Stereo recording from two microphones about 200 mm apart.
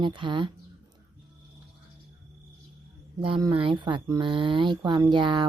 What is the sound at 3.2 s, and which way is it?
Speech, 25° right (ahead or behind).